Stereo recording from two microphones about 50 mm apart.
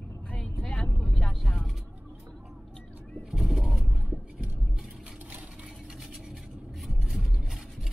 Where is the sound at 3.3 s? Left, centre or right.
Centre.